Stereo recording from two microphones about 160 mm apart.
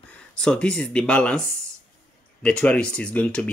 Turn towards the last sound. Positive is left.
turn(degrees=10)  # may be behind; listen again after turning